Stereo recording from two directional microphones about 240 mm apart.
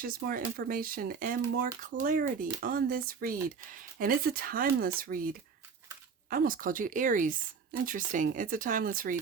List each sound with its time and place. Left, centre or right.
0.0 s speech: right
6.3 s speech: right